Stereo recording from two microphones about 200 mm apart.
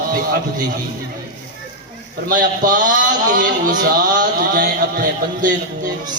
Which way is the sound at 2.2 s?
40° right (ahead or behind).